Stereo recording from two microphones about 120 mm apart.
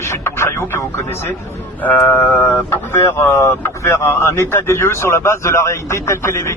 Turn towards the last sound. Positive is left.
turn(degrees=20)  # may be behind; listen again after turning